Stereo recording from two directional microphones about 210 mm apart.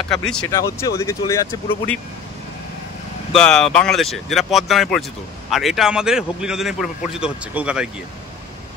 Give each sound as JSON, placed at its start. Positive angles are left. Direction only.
{"t": 0.1, "sound": "a man's voice", "side_deg": 5}
{"t": 0.5, "sound": "speech", "side_deg": 15}
{"t": 3.3, "sound": "a man's voice", "side_deg": 5}